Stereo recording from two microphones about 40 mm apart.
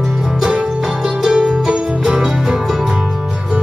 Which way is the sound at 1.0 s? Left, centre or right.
Centre.